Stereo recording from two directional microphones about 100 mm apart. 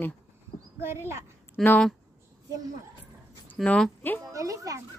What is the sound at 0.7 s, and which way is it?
Speech, 25° right (ahead or behind).